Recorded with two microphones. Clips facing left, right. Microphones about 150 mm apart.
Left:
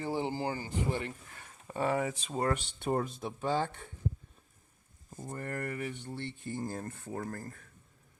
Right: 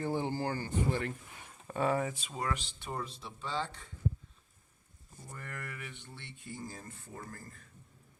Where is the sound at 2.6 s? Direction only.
55° left (ahead or behind).